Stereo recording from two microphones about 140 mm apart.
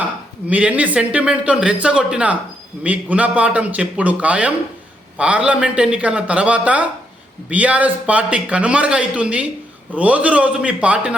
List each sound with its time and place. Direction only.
0.4 s speech: 10° right (ahead or behind)